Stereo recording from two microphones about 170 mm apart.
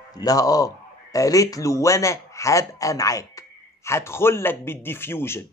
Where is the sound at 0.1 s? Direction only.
20° left (ahead or behind).